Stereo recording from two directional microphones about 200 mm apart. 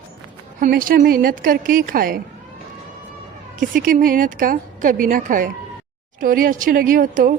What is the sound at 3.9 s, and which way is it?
A woman's voice, 45° right (ahead or behind).